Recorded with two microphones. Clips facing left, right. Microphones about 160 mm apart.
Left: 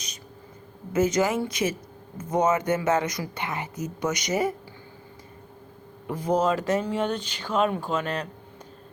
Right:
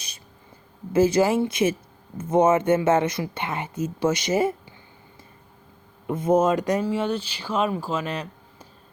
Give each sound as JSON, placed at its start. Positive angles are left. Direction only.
{"t": 0.9, "sound": "a woman's voice", "side_deg": -30}
{"t": 6.1, "sound": "a woman's voice", "side_deg": -25}